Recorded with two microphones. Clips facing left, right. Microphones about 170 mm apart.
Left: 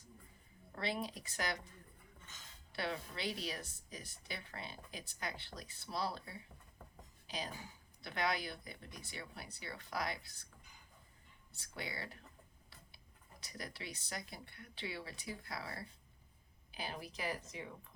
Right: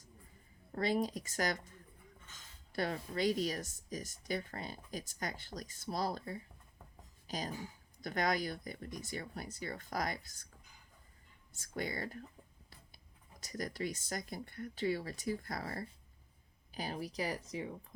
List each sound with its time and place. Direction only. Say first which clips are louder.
0.8 s speech: right 7 dB; 45° right (ahead or behind)
2.7 s speech: right 5 dB; 45° right (ahead or behind)
11.5 s speech: right 7 dB; 45° right (ahead or behind)
13.4 s speech: right 9 dB; 45° right (ahead or behind)